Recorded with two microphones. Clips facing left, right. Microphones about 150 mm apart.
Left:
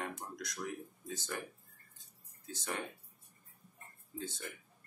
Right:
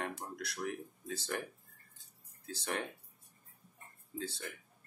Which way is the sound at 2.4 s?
65° right (ahead or behind).